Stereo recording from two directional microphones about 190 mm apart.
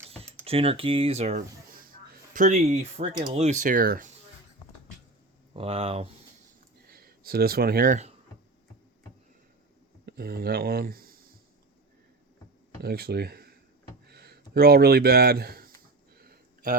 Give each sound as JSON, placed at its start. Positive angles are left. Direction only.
{"t": 0.4, "sound": "speech", "side_deg": -30}
{"t": 3.0, "sound": "speech", "side_deg": -25}
{"t": 3.3, "sound": "speech", "side_deg": -40}
{"t": 5.5, "sound": "speech", "side_deg": -30}
{"t": 6.9, "sound": "speech", "side_deg": -50}
{"t": 10.1, "sound": "speech", "side_deg": -55}
{"t": 12.8, "sound": "speech", "side_deg": -55}
{"t": 16.1, "sound": "a sound", "side_deg": -55}